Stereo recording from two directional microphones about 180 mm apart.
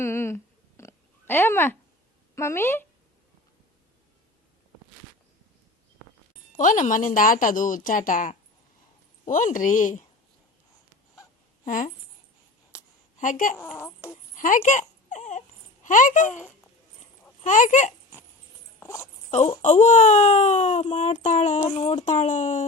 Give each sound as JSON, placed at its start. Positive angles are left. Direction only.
{"t": 0.0, "sound": "oink", "side_deg": 15}
{"t": 2.3, "sound": "a woman's voice", "side_deg": 15}
{"t": 6.6, "sound": "a woman's voice", "side_deg": 45}
{"t": 11.6, "sound": "speech", "side_deg": 45}
{"t": 12.7, "sound": "a sound", "side_deg": -5}
{"t": 13.1, "sound": "a woman's voice", "side_deg": 45}
{"t": 13.7, "sound": "a woman's voice", "side_deg": 15}
{"t": 14.3, "sound": "a sound", "side_deg": 45}
{"t": 17.4, "sound": "a woman's voice", "side_deg": 45}
{"t": 18.8, "sound": "a sound", "side_deg": 15}
{"t": 19.6, "sound": "speech", "side_deg": 40}